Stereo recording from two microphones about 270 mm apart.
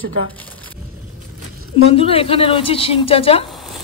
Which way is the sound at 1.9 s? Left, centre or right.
Left.